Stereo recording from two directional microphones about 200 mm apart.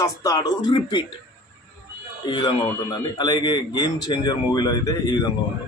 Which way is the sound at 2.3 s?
20° left (ahead or behind).